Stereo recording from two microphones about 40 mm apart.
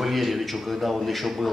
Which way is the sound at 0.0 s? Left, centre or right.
Centre.